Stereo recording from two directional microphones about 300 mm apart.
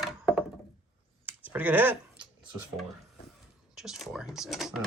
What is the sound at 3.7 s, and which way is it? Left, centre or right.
Speech, centre.